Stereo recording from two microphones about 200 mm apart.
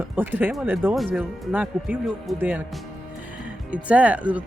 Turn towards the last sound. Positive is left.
turn(degrees=-5)  # may be behind; listen again after turning